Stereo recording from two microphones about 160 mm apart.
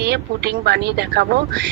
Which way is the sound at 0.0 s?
90° right.